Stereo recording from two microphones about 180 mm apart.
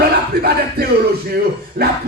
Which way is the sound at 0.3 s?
60° right (ahead or behind).